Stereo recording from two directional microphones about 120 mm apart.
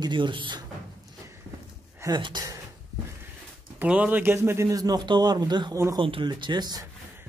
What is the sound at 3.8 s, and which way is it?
A man's voice, 10° right (ahead or behind).